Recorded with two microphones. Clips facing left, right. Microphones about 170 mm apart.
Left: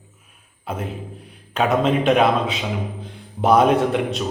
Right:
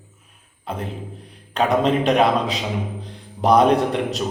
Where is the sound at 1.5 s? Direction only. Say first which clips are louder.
Even; centre (ahead or behind).